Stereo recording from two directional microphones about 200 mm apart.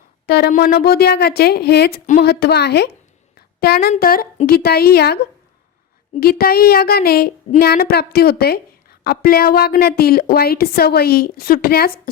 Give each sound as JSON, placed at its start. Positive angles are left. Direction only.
{"t": 0.3, "sound": "speech", "side_deg": 50}
{"t": 3.3, "sound": "a sound", "side_deg": 50}
{"t": 3.9, "sound": "speech", "side_deg": 45}